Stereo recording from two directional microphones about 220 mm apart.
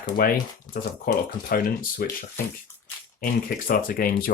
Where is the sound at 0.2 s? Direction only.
40° left (ahead or behind).